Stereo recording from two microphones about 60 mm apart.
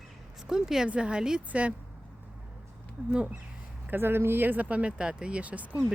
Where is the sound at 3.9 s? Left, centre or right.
Right.